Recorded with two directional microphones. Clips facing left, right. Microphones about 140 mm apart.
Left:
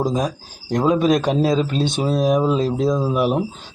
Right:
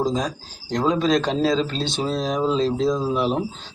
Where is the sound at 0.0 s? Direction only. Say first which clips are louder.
Left 2 dB; 20° left (ahead or behind).